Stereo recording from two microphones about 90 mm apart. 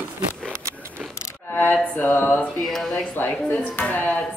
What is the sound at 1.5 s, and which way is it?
Mantra, 20° left (ahead or behind).